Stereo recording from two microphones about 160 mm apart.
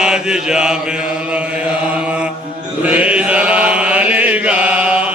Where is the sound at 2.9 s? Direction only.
10° right (ahead or behind).